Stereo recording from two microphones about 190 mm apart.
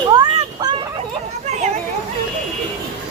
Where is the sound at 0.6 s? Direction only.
25° right (ahead or behind).